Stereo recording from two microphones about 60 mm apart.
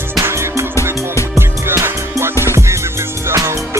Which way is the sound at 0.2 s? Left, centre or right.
Right.